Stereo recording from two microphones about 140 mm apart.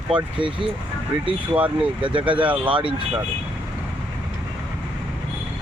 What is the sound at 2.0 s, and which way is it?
Speech, 40° right (ahead or behind).